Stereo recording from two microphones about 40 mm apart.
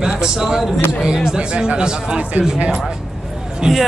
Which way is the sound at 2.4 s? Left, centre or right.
Right.